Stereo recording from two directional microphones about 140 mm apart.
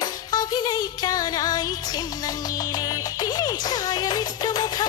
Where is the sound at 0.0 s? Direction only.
30° left (ahead or behind).